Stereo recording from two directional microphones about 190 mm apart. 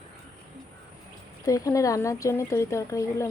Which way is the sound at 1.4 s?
20° left (ahead or behind).